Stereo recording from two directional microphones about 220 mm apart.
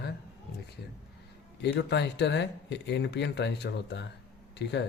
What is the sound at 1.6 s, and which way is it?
Speech, 50° left (ahead or behind).